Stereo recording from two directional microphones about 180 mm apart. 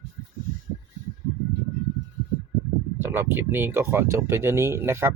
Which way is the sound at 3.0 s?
10° right (ahead or behind).